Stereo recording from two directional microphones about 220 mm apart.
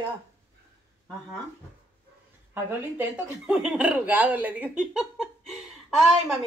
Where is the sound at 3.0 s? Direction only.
5° right (ahead or behind).